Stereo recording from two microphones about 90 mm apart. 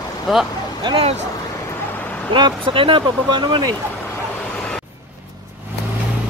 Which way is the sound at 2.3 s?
65° right (ahead or behind).